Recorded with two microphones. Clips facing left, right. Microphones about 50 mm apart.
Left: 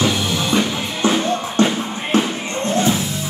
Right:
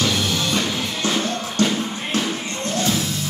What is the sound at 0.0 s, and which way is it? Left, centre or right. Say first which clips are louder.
Music: left 2 dB; centre.